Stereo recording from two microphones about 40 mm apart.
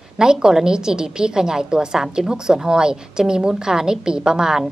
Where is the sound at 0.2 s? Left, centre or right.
Centre.